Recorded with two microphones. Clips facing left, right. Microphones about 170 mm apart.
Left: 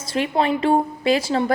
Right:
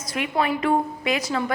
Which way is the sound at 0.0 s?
30° left (ahead or behind).